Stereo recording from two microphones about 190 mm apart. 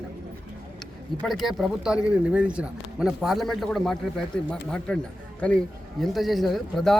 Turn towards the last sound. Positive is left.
turn(degrees=0)  # may be behind; listen again after turning